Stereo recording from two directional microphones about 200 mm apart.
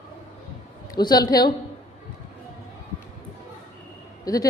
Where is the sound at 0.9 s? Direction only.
20° left (ahead or behind).